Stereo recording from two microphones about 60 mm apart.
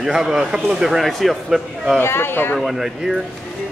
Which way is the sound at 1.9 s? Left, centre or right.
Left.